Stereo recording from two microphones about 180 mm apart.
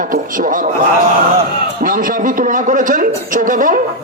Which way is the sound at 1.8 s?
50° right (ahead or behind).